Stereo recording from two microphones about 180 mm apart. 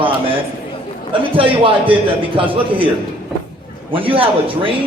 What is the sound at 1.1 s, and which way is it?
A man's voice, 30° right (ahead or behind).